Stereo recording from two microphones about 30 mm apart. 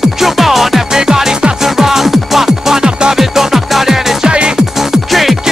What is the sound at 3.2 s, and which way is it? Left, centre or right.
Music, centre.